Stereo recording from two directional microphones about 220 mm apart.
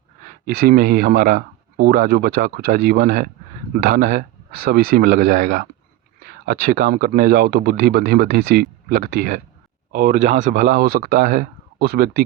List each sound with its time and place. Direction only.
0.4 s speech: 40° right (ahead or behind)